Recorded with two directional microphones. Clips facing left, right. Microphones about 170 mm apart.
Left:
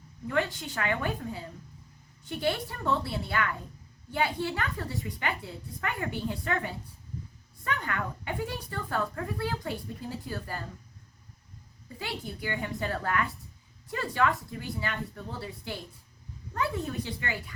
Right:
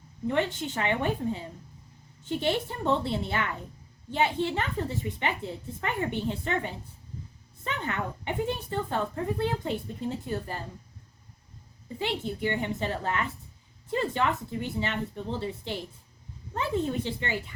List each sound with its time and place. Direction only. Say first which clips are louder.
0.3 s speech: right 2 dB; 25° right (ahead or behind)
11.9 s speech: right 6 dB; 25° right (ahead or behind)